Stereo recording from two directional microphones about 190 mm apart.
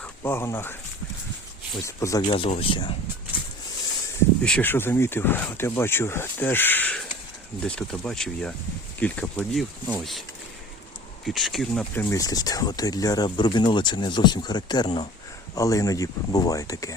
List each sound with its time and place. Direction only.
0.0 s speech: 10° left (ahead or behind)
1.8 s speech: 15° left (ahead or behind)
4.4 s speech: 10° left (ahead or behind)
11.3 s speech: centre (ahead or behind); by 16.9 s 20° left (ahead or behind)